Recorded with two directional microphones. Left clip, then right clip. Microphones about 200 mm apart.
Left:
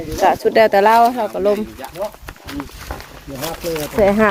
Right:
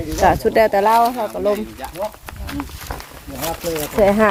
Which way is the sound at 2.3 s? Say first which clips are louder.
Right 1 dB; 15° right (ahead or behind).